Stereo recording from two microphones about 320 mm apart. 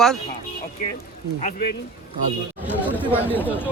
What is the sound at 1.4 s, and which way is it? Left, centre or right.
Speech, left.